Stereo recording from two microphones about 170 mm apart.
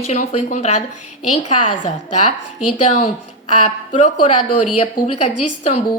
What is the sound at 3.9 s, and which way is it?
A woman's voice, 40° left (ahead or behind).